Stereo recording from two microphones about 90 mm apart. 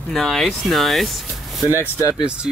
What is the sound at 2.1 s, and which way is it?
Speech, 10° right (ahead or behind).